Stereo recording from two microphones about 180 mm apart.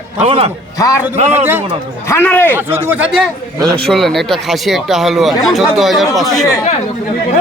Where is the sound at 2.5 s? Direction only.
10° right (ahead or behind).